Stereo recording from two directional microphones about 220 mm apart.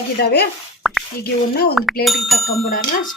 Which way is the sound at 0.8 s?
Centre (ahead or behind).